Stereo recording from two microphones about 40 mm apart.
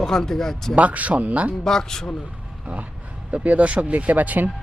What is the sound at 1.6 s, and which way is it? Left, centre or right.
Speech, centre.